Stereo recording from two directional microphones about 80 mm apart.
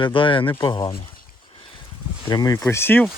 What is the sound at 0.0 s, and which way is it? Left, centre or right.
Speech, left.